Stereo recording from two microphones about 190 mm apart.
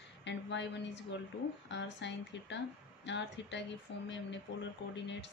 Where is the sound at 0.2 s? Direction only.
70° left (ahead or behind).